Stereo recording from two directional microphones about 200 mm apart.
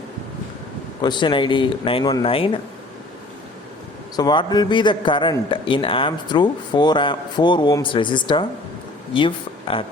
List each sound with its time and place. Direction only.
1.0 s a man's voice: 20° left (ahead or behind)
4.2 s a man's voice: 20° left (ahead or behind)